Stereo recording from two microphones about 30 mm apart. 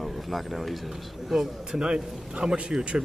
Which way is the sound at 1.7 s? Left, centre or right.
Right.